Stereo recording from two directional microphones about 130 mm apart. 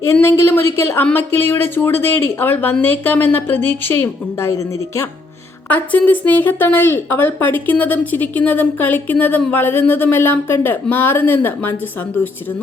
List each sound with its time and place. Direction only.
0.0 s a woman's voice: 20° left (ahead or behind)